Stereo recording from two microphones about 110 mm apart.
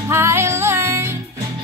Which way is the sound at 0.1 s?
25° right (ahead or behind).